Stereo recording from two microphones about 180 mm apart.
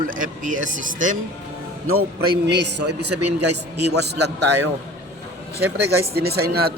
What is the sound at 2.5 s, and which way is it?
A man's voice, 70° right (ahead or behind).